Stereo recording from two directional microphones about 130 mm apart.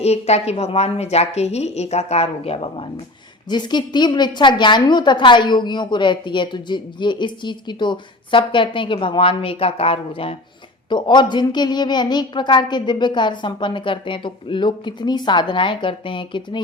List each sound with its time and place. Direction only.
0.0 s a woman's voice: 55° left (ahead or behind)
3.5 s a woman's voice: 35° left (ahead or behind)
10.8 s a woman's voice: 35° left (ahead or behind)